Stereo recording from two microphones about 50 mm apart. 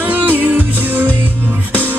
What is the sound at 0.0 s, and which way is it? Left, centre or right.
Music, right.